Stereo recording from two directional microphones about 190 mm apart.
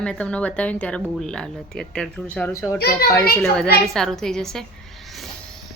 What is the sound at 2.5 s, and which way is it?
Speech, 15° left (ahead or behind).